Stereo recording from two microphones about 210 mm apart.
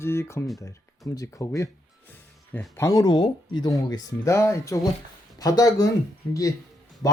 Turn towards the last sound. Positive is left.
turn(degrees=15)  # may be behind; listen again after turning